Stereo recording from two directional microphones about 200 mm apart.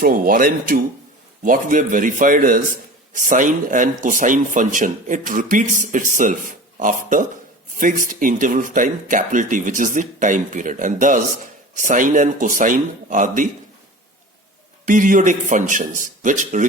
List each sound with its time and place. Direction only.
0.0 s a man's voice: 45° right (ahead or behind)
14.8 s a man's voice: 40° right (ahead or behind)